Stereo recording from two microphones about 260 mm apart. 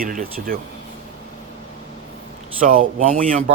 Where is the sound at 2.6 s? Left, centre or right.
Right.